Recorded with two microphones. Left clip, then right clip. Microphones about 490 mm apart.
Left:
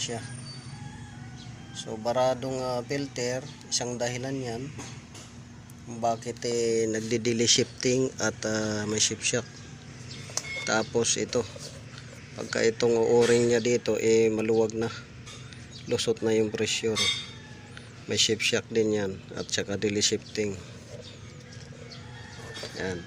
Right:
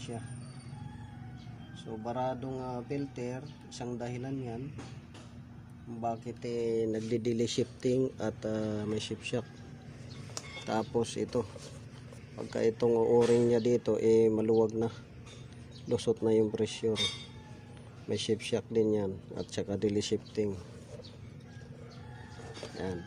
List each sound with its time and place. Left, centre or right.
1.7 s speech: right
6.0 s speech: right
10.7 s speech: right
18.1 s speech: right
22.8 s speech: right